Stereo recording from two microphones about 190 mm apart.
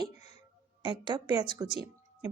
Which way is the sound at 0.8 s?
25° right (ahead or behind).